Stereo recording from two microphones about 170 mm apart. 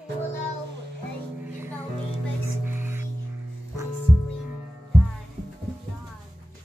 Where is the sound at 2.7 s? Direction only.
10° right (ahead or behind).